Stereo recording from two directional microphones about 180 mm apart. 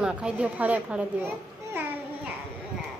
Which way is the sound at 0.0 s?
5° right (ahead or behind).